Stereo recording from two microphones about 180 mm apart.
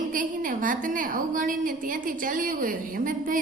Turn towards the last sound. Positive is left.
turn(degrees=-50)  # may be behind; listen again after turning